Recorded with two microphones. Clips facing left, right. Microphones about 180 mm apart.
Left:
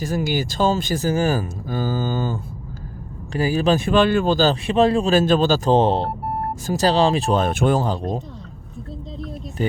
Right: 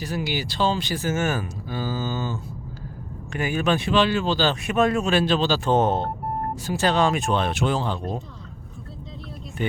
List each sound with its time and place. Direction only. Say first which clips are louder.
0.0 s speech: left 5 dB; 45° left (ahead or behind)
3.3 s speech: left 5 dB; 35° left (ahead or behind)
3.8 s speech: left 4 dB; 50° left (ahead or behind)
4.6 s speech: left 4 dB; 30° left (ahead or behind)
5.2 s speech: left 5 dB; 45° left (ahead or behind)
9.6 s speech: left 4 dB; 35° left (ahead or behind)